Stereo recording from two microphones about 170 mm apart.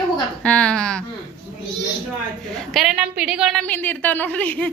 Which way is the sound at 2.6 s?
Centre (ahead or behind).